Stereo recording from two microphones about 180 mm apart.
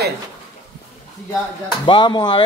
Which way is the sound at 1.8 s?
25° left (ahead or behind).